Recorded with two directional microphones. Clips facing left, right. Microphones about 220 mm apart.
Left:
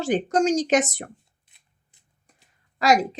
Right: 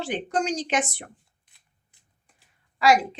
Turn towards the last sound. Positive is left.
turn(degrees=40)  # may be behind; listen again after turning